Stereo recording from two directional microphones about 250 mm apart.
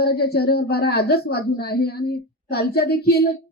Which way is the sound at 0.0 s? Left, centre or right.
Left.